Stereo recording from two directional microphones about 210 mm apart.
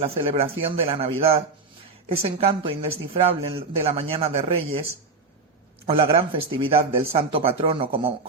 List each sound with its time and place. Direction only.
0.0 s speech: 25° right (ahead or behind)